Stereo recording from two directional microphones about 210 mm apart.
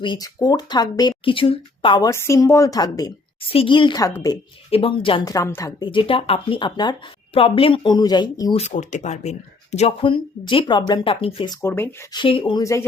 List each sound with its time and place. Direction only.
0.0 s speech: 20° left (ahead or behind)
8.6 s speech: 35° left (ahead or behind)
11.6 s speech: 10° left (ahead or behind)
12.1 s speech: 25° left (ahead or behind)